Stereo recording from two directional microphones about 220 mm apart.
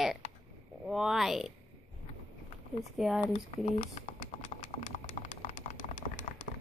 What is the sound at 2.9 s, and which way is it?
Speech, centre (ahead or behind).